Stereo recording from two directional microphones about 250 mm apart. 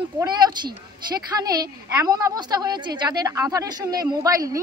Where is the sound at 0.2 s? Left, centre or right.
Centre.